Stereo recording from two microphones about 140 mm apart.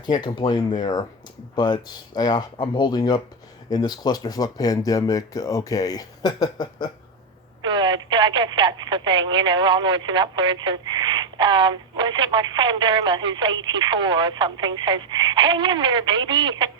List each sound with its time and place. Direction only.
0.0 s speech: 30° left (ahead or behind)
7.6 s speech: 35° right (ahead or behind)